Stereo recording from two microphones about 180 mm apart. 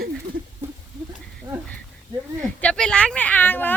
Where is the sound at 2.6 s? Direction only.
5° left (ahead or behind).